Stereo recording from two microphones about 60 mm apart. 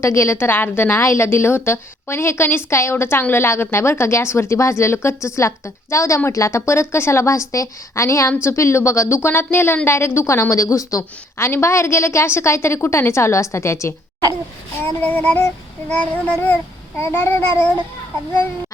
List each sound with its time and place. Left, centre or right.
0.0 s a woman's voice: left
0.9 s a woman's voice: left
9.3 s a woman's voice: left
11.3 s a woman's voice: left
15.0 s child singing: left
17.0 s a woman's voice: left